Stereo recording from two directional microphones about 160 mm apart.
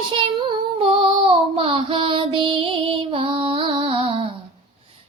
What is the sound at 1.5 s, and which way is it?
Music, 35° right (ahead or behind).